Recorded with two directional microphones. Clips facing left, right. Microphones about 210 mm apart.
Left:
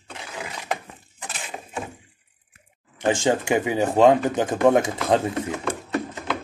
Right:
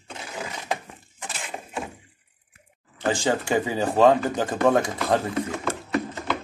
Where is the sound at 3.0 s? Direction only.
15° left (ahead or behind).